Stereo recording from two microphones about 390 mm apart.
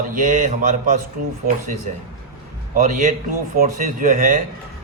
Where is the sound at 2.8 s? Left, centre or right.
Centre.